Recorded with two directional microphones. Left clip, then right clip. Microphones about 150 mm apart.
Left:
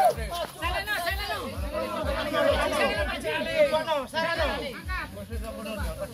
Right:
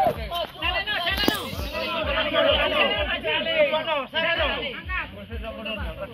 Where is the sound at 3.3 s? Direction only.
30° left (ahead or behind).